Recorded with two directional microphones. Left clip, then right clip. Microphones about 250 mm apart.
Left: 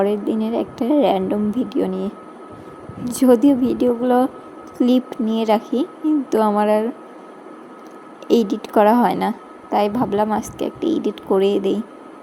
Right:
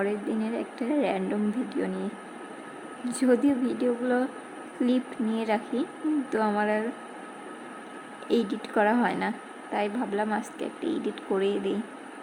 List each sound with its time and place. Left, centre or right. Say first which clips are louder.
0.0 s speech: left 10 dB; centre
3.1 s speech: left 10 dB; centre
8.3 s speech: left 10 dB; centre